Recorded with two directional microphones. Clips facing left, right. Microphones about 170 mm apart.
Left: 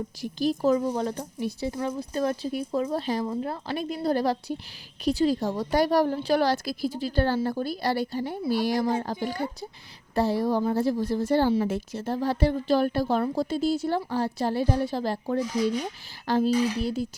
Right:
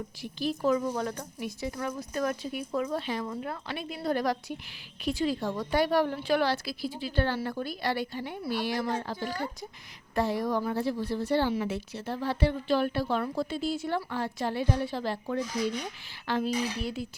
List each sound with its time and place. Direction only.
0.2 s speech: 40° left (ahead or behind)
10.2 s speech: 35° left (ahead or behind)